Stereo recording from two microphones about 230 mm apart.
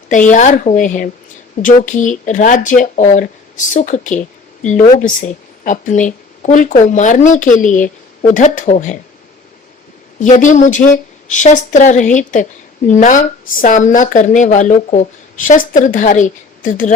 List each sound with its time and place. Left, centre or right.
0.1 s speech: left
10.2 s speech: left